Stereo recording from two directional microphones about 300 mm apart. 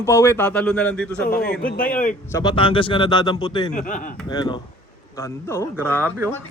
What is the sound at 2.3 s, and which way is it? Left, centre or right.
Speech, centre.